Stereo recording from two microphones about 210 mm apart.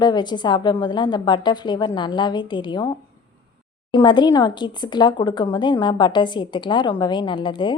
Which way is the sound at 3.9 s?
20° left (ahead or behind).